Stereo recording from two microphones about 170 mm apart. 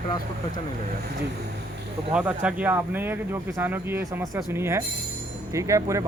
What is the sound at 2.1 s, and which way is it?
Speech, 10° right (ahead or behind).